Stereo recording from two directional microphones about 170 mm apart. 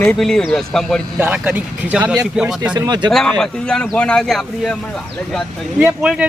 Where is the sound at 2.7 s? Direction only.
25° right (ahead or behind).